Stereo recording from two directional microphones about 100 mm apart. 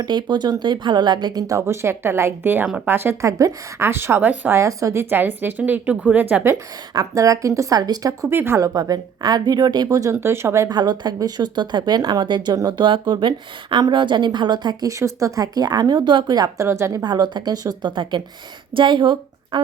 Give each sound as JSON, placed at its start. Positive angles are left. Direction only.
{"t": 0.0, "sound": "speech", "side_deg": -50}
{"t": 6.9, "sound": "a woman's voice", "side_deg": -35}
{"t": 8.3, "sound": "a woman's voice", "side_deg": -25}
{"t": 10.7, "sound": "a woman's voice", "side_deg": -45}
{"t": 16.6, "sound": "speech", "side_deg": -25}
{"t": 17.0, "sound": "a woman's voice", "side_deg": -45}